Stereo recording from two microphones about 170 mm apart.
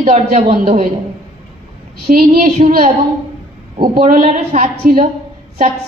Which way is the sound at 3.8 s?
55° right (ahead or behind).